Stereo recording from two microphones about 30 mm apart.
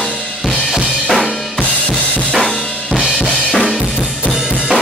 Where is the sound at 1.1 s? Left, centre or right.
Centre.